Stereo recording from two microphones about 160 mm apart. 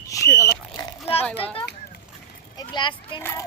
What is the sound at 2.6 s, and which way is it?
Children playing, 30° left (ahead or behind).